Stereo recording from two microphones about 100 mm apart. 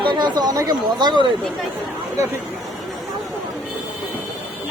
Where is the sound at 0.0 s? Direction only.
50° right (ahead or behind).